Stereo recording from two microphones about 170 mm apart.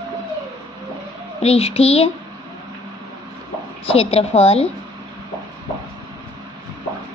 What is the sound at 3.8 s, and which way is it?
Speech, 35° left (ahead or behind).